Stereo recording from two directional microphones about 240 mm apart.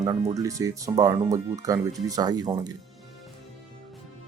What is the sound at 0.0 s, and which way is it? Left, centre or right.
Speech, centre.